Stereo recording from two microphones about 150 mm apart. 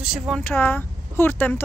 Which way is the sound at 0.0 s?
5° right (ahead or behind).